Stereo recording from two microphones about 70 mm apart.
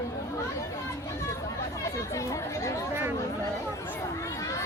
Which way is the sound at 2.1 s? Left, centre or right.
Left.